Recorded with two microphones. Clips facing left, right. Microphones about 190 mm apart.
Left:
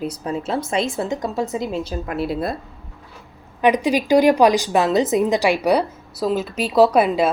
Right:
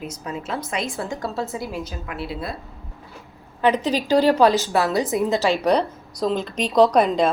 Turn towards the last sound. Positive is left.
turn(degrees=5)  # may be behind; listen again after turning